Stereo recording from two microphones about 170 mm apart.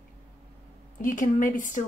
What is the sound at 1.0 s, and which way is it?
Speech, 50° left (ahead or behind).